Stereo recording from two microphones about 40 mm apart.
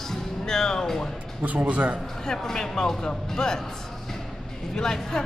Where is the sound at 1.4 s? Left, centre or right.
Right.